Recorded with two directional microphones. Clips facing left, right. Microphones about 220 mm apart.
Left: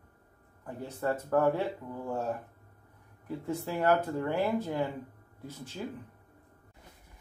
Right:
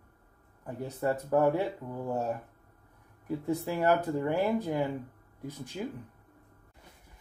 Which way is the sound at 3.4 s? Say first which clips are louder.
Right 1 dB; 10° right (ahead or behind).